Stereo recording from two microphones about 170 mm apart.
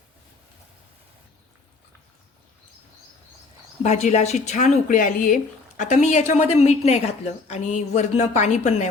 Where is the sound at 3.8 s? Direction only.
45° left (ahead or behind).